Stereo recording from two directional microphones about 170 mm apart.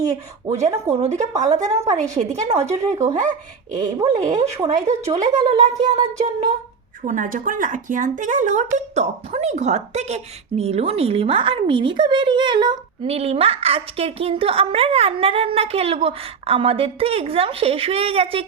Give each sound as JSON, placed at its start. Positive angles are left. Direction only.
{"t": 0.9, "sound": "speech", "side_deg": -40}
{"t": 1.5, "sound": "music", "side_deg": -20}
{"t": 1.7, "sound": "speech", "side_deg": -40}
{"t": 5.8, "sound": "music", "side_deg": -25}
{"t": 7.0, "sound": "speech", "side_deg": -50}